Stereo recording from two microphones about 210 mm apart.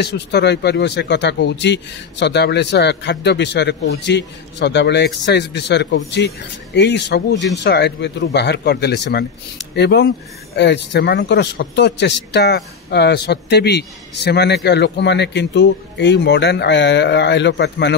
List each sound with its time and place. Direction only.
0.0 s speech: 55° left (ahead or behind)